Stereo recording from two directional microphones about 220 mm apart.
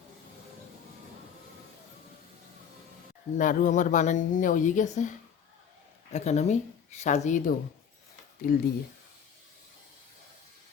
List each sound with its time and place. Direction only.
3.3 s a woman's voice: 35° left (ahead or behind)
6.1 s a woman's voice: 30° left (ahead or behind)